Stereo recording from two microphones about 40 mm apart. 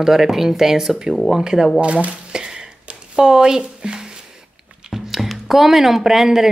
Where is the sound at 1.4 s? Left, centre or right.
Centre.